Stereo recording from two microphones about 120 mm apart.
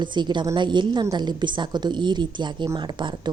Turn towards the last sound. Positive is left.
turn(degrees=-40)  # may be behind; listen again after turning